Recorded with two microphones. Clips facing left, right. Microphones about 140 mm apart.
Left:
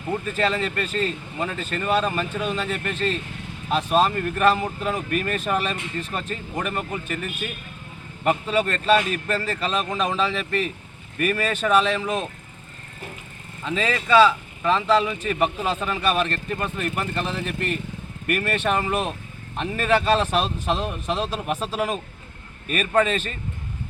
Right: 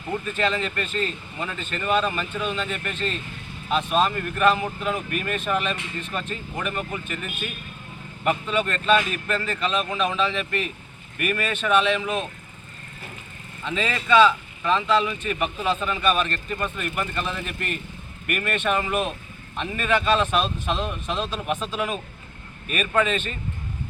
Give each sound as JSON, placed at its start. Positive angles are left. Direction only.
{"t": 0.3, "sound": "speech", "side_deg": 40}
{"t": 13.7, "sound": "speech", "side_deg": 35}